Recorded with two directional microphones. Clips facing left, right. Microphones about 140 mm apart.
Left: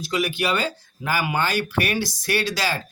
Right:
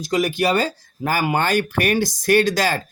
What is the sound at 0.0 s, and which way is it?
Speech, 45° right (ahead or behind).